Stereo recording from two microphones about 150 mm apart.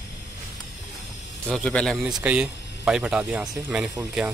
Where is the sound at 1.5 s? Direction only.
5° left (ahead or behind).